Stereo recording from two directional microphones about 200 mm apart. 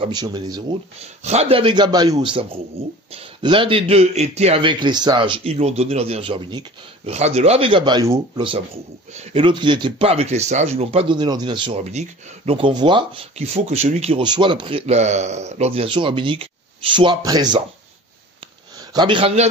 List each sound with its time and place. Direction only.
0.0 s speech: 20° right (ahead or behind)
1.0 s speech: 35° right (ahead or behind)
18.8 s a man's voice: 20° right (ahead or behind)